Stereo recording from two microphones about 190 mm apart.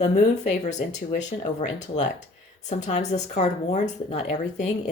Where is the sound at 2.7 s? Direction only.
40° left (ahead or behind).